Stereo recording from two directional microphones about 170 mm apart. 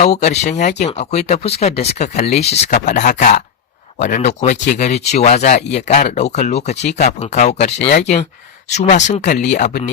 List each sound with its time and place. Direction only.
0.0 s speech: 40° left (ahead or behind)